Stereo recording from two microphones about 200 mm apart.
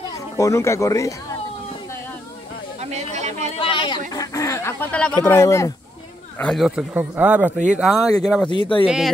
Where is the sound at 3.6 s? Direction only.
25° left (ahead or behind); by 5.1 s 10° left (ahead or behind).